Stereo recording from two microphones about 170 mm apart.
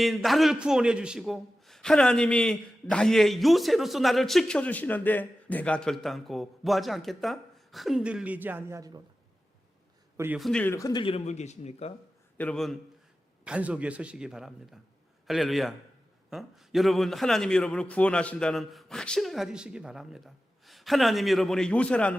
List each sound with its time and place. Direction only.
0.0 s a man's voice: centre (ahead or behind); by 9.0 s 20° right (ahead or behind)
10.3 s speech: centre (ahead or behind); by 11.9 s 40° left (ahead or behind)
12.4 s a man's voice: 5° left (ahead or behind)